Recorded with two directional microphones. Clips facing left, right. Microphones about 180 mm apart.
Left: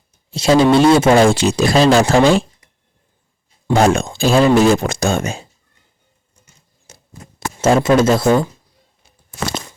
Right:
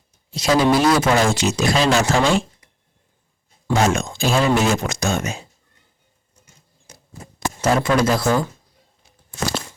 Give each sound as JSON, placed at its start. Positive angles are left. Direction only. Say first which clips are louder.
{"t": 0.3, "sound": "speech", "louder": "left 5 dB", "side_deg": 25}
{"t": 3.8, "sound": "speech", "louder": "left 5 dB", "side_deg": 35}
{"t": 6.9, "sound": "a sound", "louder": "left 1 dB", "side_deg": 25}
{"t": 7.3, "sound": "speech", "louder": "left 5 dB", "side_deg": 25}